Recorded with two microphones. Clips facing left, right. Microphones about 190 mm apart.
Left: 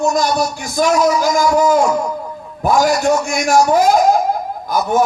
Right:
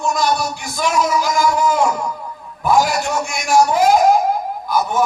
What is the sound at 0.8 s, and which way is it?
Speech, 45° left (ahead or behind).